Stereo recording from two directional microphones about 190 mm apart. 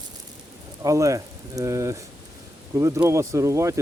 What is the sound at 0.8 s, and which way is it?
Speech, 15° right (ahead or behind).